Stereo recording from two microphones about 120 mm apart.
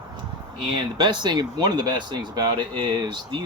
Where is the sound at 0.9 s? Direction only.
40° right (ahead or behind).